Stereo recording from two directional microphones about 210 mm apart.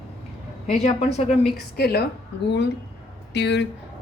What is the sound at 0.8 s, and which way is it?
Speech, 30° left (ahead or behind).